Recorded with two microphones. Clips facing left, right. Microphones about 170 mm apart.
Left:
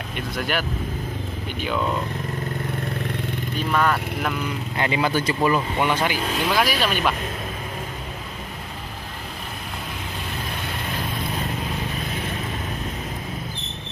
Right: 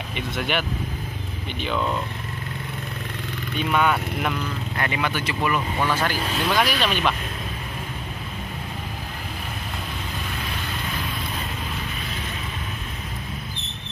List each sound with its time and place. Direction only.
0.1 s speech: centre (ahead or behind)
3.5 s speech: centre (ahead or behind)
4.7 s speech: 25° left (ahead or behind)
5.8 s speech: 20° left (ahead or behind)
6.3 s speech: centre (ahead or behind)